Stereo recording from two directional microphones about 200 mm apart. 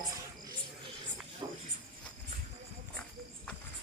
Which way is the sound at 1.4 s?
20° right (ahead or behind).